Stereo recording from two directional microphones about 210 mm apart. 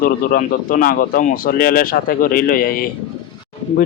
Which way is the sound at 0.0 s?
45° left (ahead or behind).